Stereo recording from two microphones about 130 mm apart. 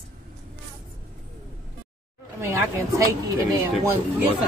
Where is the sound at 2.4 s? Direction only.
25° right (ahead or behind).